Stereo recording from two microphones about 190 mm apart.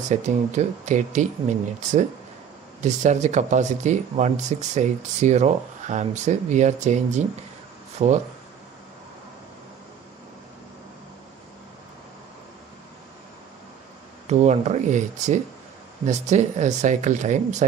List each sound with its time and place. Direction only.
0.1 s speech: 40° right (ahead or behind)
14.2 s speech: 35° right (ahead or behind)